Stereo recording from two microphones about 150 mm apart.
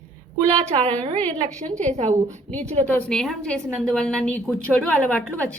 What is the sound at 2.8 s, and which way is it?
A woman's voice, 10° left (ahead or behind).